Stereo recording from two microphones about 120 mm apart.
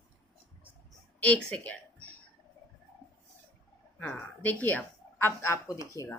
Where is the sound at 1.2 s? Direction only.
10° left (ahead or behind).